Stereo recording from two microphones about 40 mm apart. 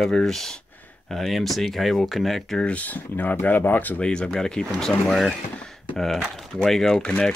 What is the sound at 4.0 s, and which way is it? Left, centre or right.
Speech, left.